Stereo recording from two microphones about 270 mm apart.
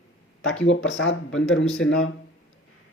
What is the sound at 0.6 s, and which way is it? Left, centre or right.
Speech, left.